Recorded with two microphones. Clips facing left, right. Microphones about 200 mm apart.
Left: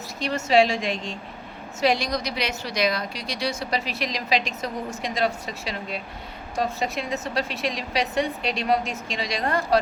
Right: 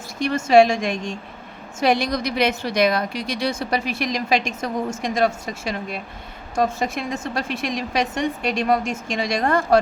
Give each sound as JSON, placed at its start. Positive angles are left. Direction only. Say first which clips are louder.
{"t": 0.2, "sound": "a woman's voice", "louder": "right 5 dB", "side_deg": -50}